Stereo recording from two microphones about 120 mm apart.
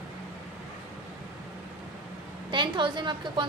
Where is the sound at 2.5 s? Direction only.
40° right (ahead or behind).